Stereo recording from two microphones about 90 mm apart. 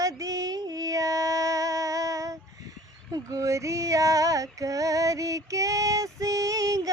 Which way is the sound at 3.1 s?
35° right (ahead or behind).